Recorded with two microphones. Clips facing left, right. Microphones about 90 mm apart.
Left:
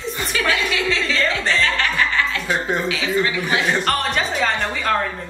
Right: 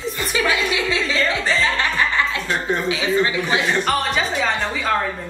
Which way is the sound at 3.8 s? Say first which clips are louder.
Even; centre (ahead or behind).